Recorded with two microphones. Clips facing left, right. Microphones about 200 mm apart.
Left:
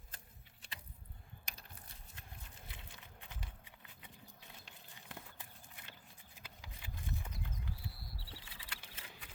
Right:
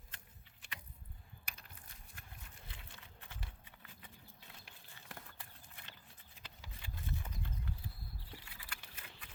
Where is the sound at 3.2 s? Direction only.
15° left (ahead or behind).